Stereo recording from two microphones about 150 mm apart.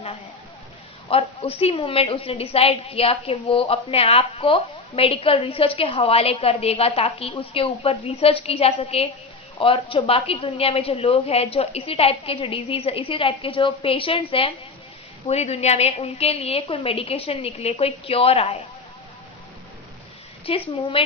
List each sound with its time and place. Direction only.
1.1 s a woman's voice: 40° left (ahead or behind)
15.3 s a woman's voice: 45° left (ahead or behind)
20.4 s a woman's voice: 40° left (ahead or behind)